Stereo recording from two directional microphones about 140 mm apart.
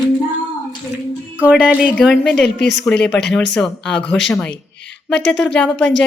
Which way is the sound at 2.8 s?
5° left (ahead or behind).